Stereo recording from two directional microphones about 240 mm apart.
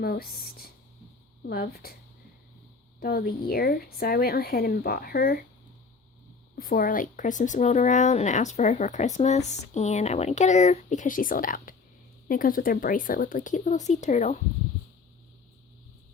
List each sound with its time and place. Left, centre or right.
0.0 s speech: left
3.0 s speech: left
6.6 s a woman's voice: left